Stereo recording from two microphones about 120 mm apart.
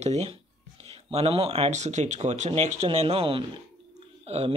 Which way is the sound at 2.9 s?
55° right (ahead or behind).